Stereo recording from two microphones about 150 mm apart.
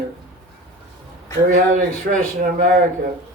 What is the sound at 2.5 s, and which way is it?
Speech, 90° right.